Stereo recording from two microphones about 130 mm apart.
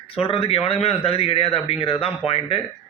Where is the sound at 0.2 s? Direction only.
45° left (ahead or behind).